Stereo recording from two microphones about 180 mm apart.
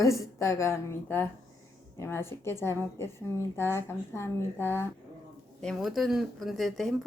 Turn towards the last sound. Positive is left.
turn(degrees=0)  # may be behind; listen again after turning